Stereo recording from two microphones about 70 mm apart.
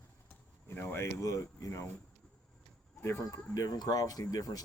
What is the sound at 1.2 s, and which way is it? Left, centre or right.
Speech, left.